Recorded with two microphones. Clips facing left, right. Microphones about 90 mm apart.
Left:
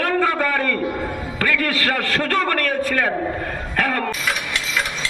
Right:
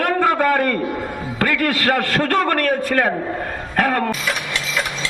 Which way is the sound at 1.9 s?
40° right (ahead or behind).